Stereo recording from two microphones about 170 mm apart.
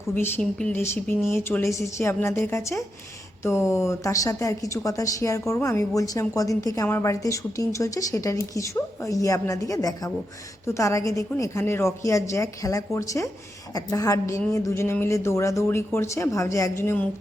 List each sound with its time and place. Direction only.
0.1 s speech: 10° left (ahead or behind)